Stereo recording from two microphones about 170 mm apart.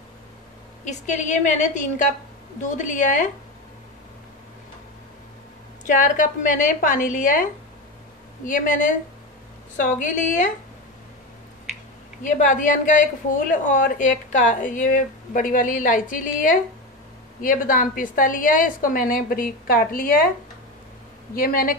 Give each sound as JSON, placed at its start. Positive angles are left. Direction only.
{"t": 0.8, "sound": "speech", "side_deg": 45}
{"t": 5.9, "sound": "speech", "side_deg": 50}
{"t": 8.5, "sound": "speech", "side_deg": 50}
{"t": 12.2, "sound": "a woman's voice", "side_deg": 50}
{"t": 21.4, "sound": "a woman's voice", "side_deg": 55}